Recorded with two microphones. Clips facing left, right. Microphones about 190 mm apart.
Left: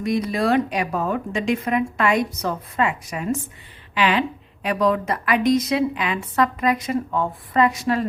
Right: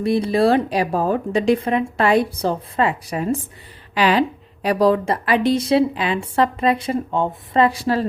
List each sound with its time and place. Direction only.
0.0 s a woman's voice: 30° right (ahead or behind)